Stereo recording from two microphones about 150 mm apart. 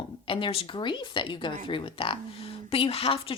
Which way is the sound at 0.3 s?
35° left (ahead or behind).